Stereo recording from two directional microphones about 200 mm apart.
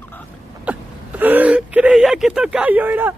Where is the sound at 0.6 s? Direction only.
10° right (ahead or behind).